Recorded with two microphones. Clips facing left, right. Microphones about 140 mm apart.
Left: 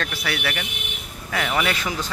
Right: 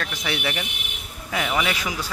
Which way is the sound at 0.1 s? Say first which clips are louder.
Even; 20° right (ahead or behind).